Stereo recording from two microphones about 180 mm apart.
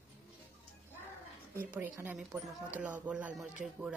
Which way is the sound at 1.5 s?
10° right (ahead or behind).